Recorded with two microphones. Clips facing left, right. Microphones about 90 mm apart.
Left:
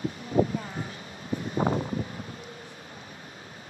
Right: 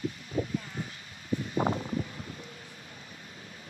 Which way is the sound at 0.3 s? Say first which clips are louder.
Left 9 dB; 75° left (ahead or behind).